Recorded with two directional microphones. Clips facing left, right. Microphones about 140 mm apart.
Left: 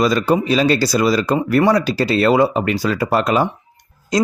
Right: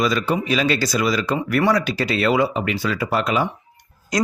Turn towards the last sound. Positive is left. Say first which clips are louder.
# left 4 dB
turn(degrees=25)  # may be behind; listen again after turning